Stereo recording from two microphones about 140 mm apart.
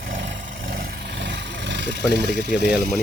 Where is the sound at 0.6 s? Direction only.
90° right.